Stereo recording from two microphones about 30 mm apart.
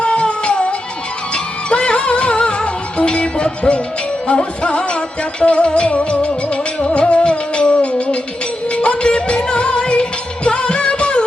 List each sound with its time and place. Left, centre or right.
0.0 s music: left